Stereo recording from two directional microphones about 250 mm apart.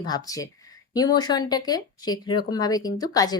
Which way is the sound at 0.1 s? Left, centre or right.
Centre.